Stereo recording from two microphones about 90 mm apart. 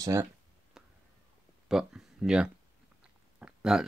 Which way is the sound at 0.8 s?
5° right (ahead or behind).